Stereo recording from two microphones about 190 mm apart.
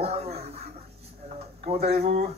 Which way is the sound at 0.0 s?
30° right (ahead or behind).